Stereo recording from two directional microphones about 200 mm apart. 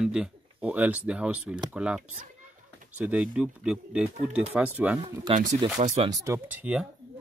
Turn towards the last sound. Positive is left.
turn(degrees=-5)  # may be behind; listen again after turning